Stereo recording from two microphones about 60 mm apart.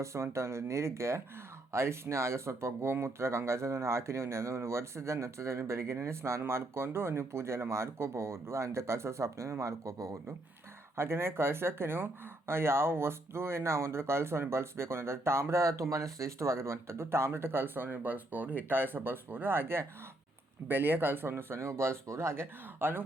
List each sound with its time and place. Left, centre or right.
0.0 s speech: right
10.9 s speech: right